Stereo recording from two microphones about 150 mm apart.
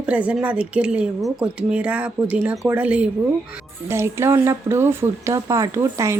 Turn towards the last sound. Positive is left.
turn(degrees=-20)  # may be behind; listen again after turning